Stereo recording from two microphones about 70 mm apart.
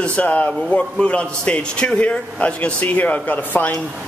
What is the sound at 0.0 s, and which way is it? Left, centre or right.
A man's voice, centre.